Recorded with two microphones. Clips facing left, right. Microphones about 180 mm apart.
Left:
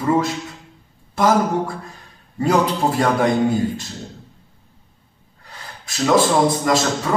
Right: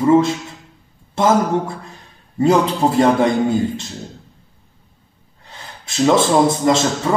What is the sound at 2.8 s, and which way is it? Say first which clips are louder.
Speech: right 3 dB; 25° right (ahead or behind).